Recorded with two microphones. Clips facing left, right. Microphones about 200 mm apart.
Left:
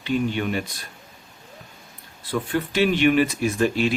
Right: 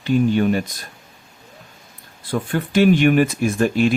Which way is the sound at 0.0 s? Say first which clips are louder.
Right 7 dB; 45° right (ahead or behind).